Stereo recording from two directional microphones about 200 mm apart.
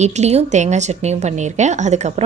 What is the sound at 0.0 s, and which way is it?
A woman's voice, 35° right (ahead or behind).